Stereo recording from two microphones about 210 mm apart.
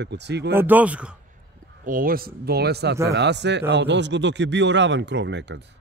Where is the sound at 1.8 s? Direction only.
40° right (ahead or behind); by 5.6 s 60° right (ahead or behind).